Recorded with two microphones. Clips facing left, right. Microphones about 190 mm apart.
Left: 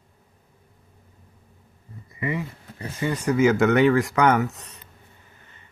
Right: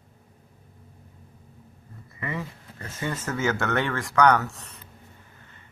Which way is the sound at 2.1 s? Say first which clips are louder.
Left 5 dB; 15° left (ahead or behind).